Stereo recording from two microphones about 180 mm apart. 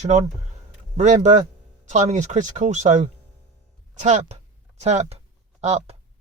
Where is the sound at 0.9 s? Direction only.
40° right (ahead or behind).